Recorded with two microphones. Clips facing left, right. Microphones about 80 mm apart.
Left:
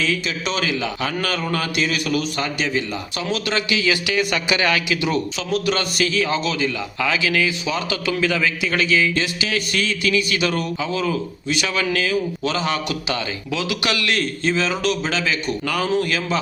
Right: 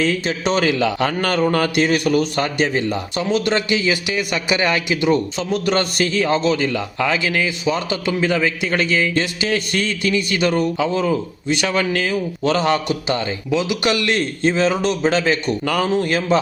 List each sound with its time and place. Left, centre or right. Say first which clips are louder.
0.0 s a man's voice: right 4 dB; right
1.5 s a man's voice: right 5 dB; right
3.3 s a man's voice: right 4 dB; right
4.1 s speech: even; centre
5.0 s a man's voice: right 4 dB; right
10.8 s a man's voice: right 5 dB; right
11.0 s a man's voice: right 3 dB; right
12.9 s a man's voice: right 4 dB; right
14.8 s speech: right 4 dB; right
15.1 s a man's voice: right 5 dB; right